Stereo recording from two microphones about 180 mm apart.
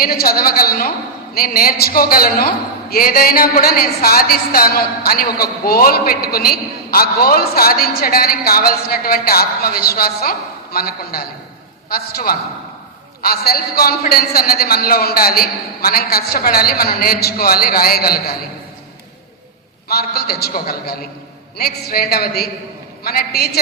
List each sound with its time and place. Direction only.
0.0 s a woman's voice: 55° left (ahead or behind)
19.9 s a woman's voice: 60° left (ahead or behind)